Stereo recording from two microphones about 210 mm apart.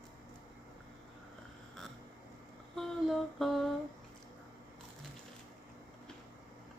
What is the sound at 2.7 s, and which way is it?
Humming, centre (ahead or behind).